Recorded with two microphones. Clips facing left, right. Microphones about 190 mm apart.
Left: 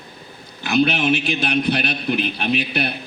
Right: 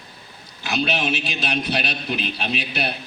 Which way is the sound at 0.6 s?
55° left (ahead or behind).